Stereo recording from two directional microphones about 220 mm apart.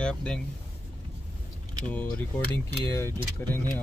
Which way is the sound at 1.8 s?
5° left (ahead or behind).